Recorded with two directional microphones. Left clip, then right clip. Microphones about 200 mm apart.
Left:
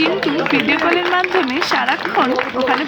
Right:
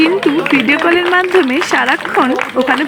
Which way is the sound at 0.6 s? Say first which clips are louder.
Right 4 dB; 20° right (ahead or behind).